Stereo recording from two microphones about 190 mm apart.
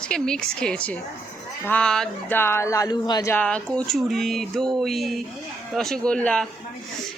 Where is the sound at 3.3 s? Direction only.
5° left (ahead or behind).